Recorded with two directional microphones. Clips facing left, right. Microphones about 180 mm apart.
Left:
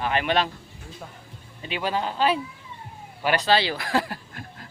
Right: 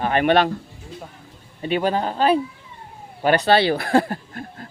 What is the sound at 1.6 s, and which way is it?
Speech, 50° right (ahead or behind).